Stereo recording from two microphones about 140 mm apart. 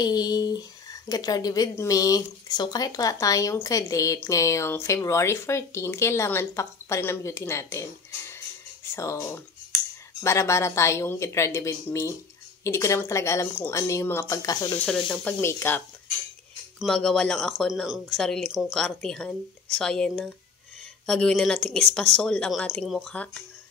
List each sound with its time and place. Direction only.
0.0 s speech: 30° left (ahead or behind)
8.9 s speech: 20° left (ahead or behind)
14.9 s speech: 5° left (ahead or behind)
15.4 s speech: 15° left (ahead or behind)
16.8 s speech: 5° left (ahead or behind)